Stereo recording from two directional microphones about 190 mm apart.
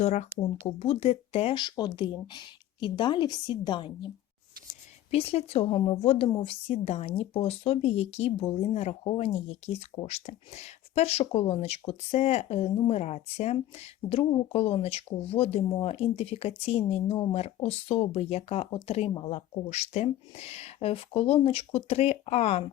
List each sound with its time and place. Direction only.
0.0 s speech: 35° left (ahead or behind)
5.1 s speech: 30° left (ahead or behind)